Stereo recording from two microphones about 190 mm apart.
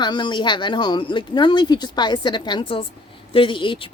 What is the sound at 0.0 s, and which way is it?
A woman's voice, 25° left (ahead or behind).